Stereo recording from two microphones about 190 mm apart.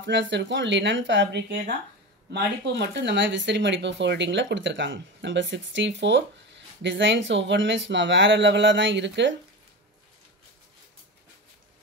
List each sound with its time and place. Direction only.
0.0 s speech: 70° right (ahead or behind)